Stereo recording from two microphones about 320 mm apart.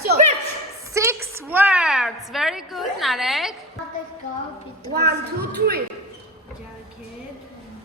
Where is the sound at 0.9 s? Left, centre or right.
Centre.